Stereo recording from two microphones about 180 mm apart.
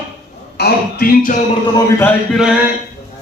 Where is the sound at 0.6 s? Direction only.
60° left (ahead or behind).